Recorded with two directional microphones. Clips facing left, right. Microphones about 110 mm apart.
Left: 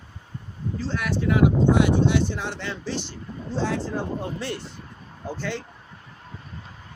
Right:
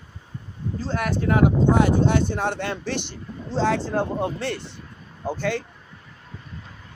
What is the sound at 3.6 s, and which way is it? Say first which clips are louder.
Speech: right 5 dB; 90° right.